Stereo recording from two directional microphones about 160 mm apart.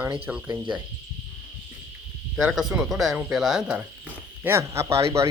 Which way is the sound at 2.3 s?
5° right (ahead or behind).